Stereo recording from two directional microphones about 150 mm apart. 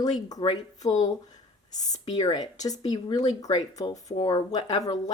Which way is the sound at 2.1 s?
25° left (ahead or behind).